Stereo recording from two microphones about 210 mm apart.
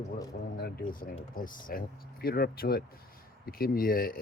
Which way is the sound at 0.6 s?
45° left (ahead or behind).